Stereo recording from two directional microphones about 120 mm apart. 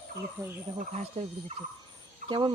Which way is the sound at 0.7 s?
70° right (ahead or behind).